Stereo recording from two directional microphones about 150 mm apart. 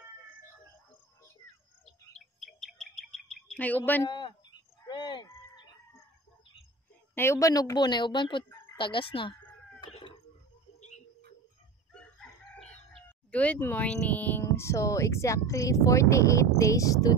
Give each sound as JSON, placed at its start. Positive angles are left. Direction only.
{"t": 1.9, "sound": "bird", "side_deg": 0}
{"t": 4.1, "sound": "a sound", "side_deg": 30}
{"t": 7.2, "sound": "speech", "side_deg": 20}
{"t": 8.7, "sound": "chicken", "side_deg": 35}
{"t": 11.9, "sound": "chicken", "side_deg": 5}